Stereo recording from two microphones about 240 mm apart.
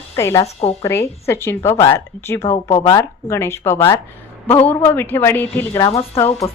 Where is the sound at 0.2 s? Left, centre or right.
Centre.